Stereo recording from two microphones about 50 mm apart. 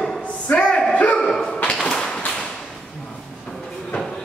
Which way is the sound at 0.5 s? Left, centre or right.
Left.